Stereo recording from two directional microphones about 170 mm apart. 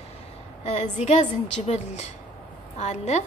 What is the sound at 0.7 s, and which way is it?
A woman's voice, 45° left (ahead or behind).